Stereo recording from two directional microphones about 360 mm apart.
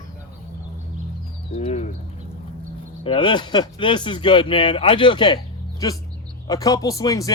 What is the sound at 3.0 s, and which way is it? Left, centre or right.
Speech, centre.